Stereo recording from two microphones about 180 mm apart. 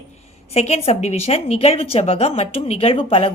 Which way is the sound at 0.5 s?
35° left (ahead or behind).